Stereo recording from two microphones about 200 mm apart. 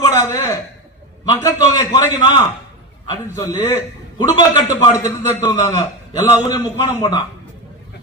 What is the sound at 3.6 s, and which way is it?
A man's voice, 20° left (ahead or behind).